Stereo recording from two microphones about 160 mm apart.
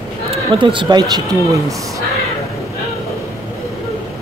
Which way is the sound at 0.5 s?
30° right (ahead or behind).